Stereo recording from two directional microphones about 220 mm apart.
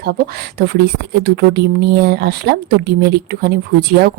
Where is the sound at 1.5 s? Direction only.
45° right (ahead or behind).